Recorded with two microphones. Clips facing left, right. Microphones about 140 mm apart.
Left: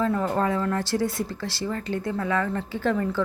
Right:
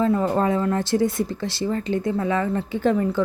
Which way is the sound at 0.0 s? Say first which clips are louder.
Right 4 dB; 20° right (ahead or behind).